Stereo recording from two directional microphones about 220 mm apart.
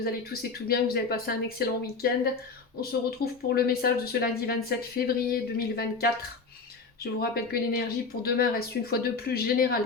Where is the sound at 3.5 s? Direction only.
45° left (ahead or behind).